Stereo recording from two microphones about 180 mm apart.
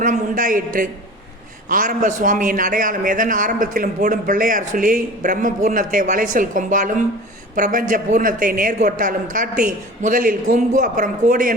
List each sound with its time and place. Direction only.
0.0 s a man's voice: 45° right (ahead or behind)